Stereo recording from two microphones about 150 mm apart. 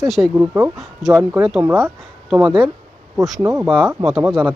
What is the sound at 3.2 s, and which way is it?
Speech, 20° right (ahead or behind).